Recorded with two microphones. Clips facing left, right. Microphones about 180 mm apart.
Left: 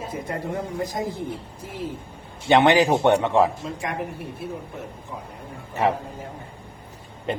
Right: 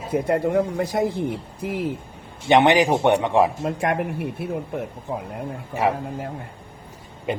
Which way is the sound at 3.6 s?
60° right (ahead or behind).